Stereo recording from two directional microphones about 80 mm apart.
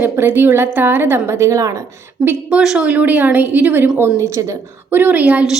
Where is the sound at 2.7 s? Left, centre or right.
Centre.